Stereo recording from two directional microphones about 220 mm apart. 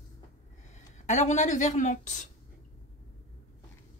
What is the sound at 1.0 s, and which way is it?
Speech, 35° left (ahead or behind).